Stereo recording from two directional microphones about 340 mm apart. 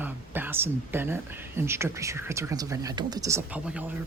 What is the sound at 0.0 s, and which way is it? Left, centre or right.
Speech, centre.